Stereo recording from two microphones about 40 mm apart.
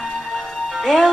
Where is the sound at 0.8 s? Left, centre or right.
Centre.